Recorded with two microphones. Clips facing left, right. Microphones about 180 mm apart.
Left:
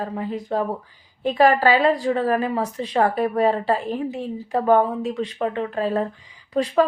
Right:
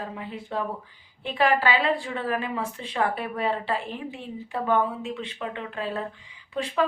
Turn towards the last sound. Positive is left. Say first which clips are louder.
# left 7 dB
turn(degrees=40)  # may be behind; listen again after turning